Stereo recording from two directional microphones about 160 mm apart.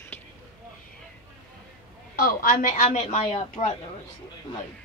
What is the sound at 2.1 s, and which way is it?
A woman's voice, 55° left (ahead or behind).